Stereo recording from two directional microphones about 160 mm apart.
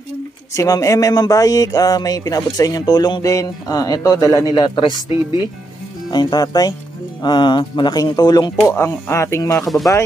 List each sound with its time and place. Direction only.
0.6 s speech: 20° left (ahead or behind)
6.0 s speech: 25° left (ahead or behind)